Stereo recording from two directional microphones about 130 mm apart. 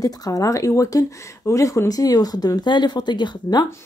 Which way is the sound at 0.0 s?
30° left (ahead or behind).